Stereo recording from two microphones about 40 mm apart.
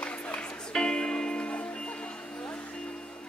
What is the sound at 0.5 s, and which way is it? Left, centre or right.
Music, left.